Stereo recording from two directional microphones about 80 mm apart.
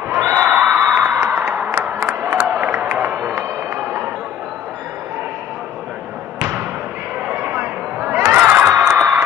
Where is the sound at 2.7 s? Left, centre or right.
Right.